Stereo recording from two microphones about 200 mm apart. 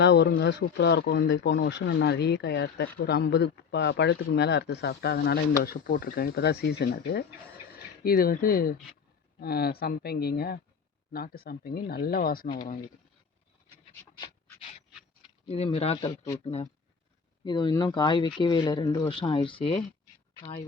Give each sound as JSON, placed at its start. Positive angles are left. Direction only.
{"t": 0.0, "sound": "speech", "side_deg": 60}
{"t": 14.0, "sound": "pant", "side_deg": 10}
{"t": 15.4, "sound": "speech", "side_deg": 30}